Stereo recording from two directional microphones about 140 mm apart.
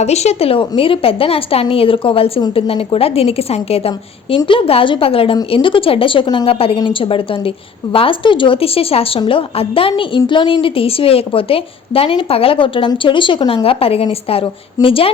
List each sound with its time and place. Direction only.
0.0 s a woman's voice: 50° left (ahead or behind)